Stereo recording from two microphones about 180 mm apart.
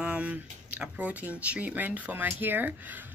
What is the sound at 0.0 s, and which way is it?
Speech, 5° right (ahead or behind).